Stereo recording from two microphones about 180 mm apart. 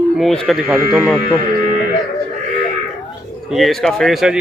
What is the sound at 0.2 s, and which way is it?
Speech, centre (ahead or behind).